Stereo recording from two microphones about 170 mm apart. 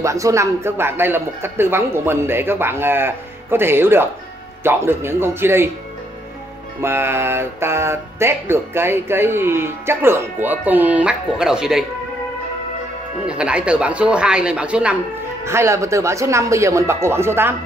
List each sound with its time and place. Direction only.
0.0 s speech: 20° right (ahead or behind)
6.8 s speech: 15° right (ahead or behind)
13.3 s speech: 5° right (ahead or behind)